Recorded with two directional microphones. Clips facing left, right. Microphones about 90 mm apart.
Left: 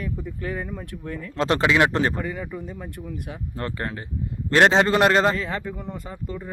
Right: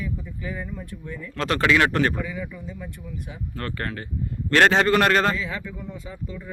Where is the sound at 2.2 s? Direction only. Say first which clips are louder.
Left 2 dB; 50° left (ahead or behind).